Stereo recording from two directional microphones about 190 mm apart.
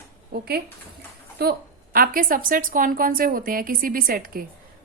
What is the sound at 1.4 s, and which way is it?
A woman's voice, 50° right (ahead or behind).